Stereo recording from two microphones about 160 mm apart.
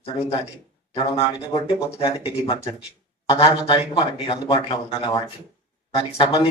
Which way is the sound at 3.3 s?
35° left (ahead or behind).